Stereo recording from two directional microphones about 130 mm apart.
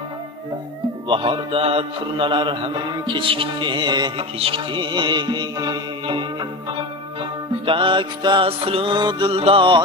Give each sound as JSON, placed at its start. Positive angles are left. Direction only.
{"t": 1.0, "sound": "mantra", "side_deg": -40}
{"t": 7.6, "sound": "mantra", "side_deg": -40}